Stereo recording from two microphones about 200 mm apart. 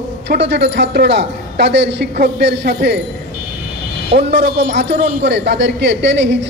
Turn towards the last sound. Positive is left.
turn(degrees=-60)  # may be behind; listen again after turning